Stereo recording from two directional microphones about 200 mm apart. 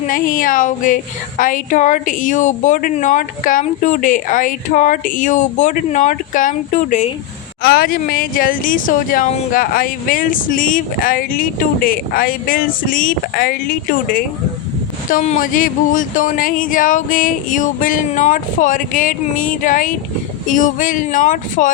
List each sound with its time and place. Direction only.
0.1 s a woman's voice: 45° left (ahead or behind)
7.6 s a woman's voice: 50° left (ahead or behind)